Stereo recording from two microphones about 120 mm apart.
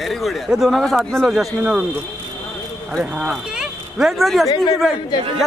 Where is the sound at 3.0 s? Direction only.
5° right (ahead or behind).